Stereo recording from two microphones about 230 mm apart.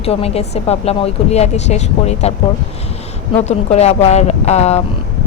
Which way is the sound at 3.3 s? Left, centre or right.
Left.